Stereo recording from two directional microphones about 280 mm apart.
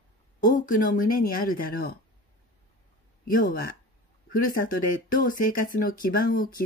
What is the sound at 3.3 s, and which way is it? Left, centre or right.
Speech, left.